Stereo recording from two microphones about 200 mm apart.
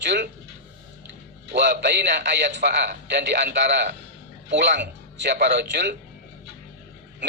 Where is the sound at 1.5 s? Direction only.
60° right (ahead or behind).